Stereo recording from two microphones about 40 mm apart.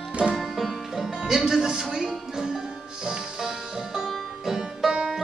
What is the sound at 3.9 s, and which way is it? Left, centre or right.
Music, centre.